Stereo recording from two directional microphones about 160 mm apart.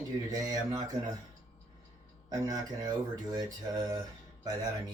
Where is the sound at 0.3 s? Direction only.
25° right (ahead or behind).